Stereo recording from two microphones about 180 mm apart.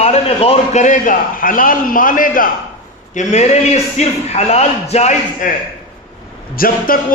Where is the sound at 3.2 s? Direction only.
40° left (ahead or behind).